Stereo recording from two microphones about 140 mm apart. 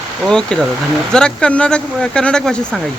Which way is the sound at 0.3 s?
5° left (ahead or behind).